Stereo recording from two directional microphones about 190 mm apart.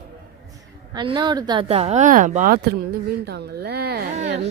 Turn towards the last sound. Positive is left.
turn(degrees=-35)  # may be behind; listen again after turning